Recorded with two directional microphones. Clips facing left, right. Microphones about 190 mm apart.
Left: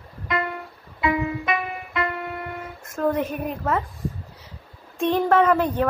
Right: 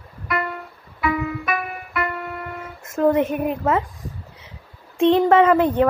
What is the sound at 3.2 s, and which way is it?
Speech, 55° right (ahead or behind).